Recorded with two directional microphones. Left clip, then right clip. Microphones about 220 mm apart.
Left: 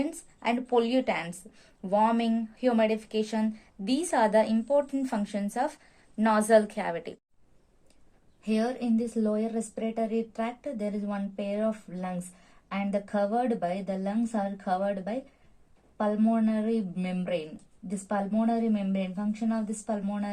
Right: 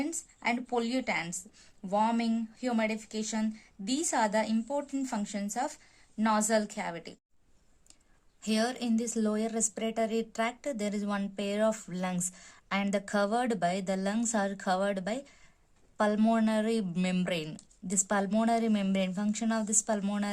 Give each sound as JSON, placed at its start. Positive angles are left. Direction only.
{"t": 0.0, "sound": "a woman's voice", "side_deg": -15}
{"t": 8.4, "sound": "a woman's voice", "side_deg": -40}